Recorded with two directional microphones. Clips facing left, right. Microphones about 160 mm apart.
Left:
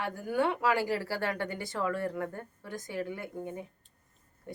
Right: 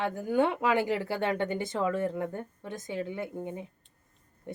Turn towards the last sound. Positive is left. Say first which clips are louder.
# right 3 dB
turn(degrees=-20)  # may be behind; listen again after turning